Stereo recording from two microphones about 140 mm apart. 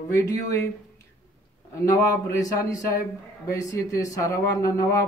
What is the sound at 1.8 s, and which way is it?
Speech, 20° left (ahead or behind).